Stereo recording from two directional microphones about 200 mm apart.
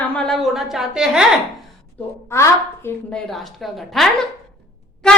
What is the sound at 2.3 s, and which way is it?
Speech, 15° left (ahead or behind).